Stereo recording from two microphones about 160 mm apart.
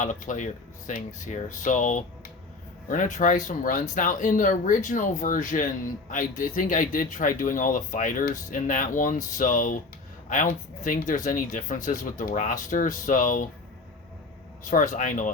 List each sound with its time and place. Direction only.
0.0 s speech: 50° left (ahead or behind)
14.6 s speech: 55° left (ahead or behind)